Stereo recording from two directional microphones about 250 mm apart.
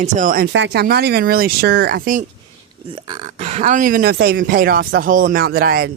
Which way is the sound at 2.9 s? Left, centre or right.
Right.